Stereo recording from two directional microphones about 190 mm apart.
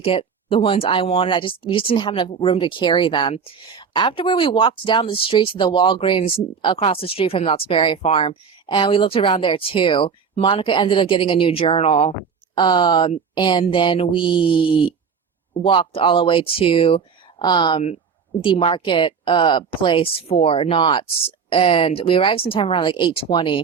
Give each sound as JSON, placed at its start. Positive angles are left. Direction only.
{"t": 0.0, "sound": "speech", "side_deg": 30}